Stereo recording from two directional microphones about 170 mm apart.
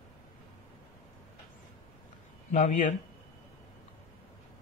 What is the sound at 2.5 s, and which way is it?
Speech, 45° left (ahead or behind).